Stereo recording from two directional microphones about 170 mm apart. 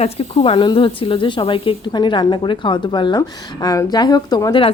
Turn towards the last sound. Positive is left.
turn(degrees=25)  # may be behind; listen again after turning